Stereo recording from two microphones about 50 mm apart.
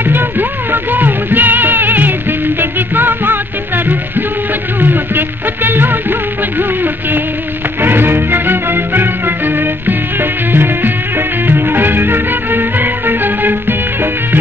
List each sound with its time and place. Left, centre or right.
0.1 s music: right
7.8 s music: right
10.5 s music: right